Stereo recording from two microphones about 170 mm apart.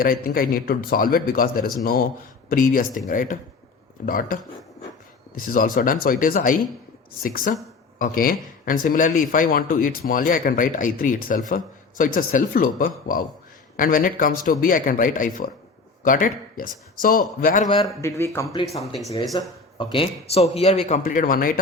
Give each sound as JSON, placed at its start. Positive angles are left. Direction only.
{"t": 0.0, "sound": "speech", "side_deg": 60}
{"t": 5.4, "sound": "speech", "side_deg": 55}
{"t": 17.8, "sound": "a man's voice", "side_deg": 20}